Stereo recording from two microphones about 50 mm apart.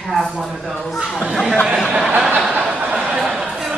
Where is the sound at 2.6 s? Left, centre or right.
Right.